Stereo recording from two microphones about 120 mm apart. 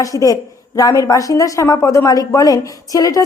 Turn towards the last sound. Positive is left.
turn(degrees=30)  # may be behind; listen again after turning